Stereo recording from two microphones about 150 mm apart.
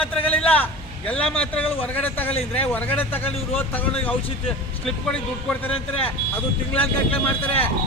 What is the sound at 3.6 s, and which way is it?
Speech, 15° left (ahead or behind).